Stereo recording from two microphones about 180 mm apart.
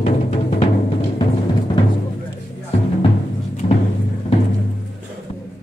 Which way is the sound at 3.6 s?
35° left (ahead or behind).